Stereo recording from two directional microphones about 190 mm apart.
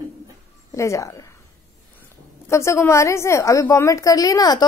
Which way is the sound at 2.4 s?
15° left (ahead or behind).